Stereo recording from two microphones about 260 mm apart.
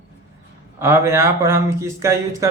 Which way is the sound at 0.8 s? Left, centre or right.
Centre.